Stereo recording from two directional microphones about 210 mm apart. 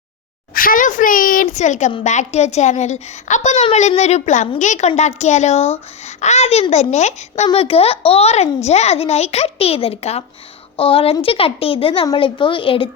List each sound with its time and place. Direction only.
0.5 s a woman's voice: 40° left (ahead or behind); by 12.9 s 25° left (ahead or behind)